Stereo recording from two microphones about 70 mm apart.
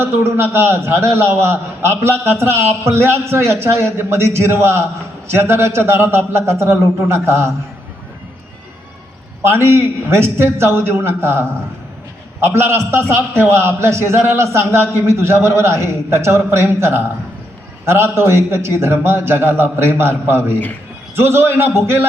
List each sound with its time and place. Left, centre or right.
0.0 s a man's voice: right
9.4 s a man's voice: right